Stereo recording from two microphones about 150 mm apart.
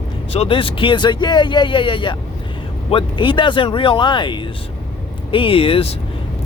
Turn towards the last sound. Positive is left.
turn(degrees=40)  # may be behind; listen again after turning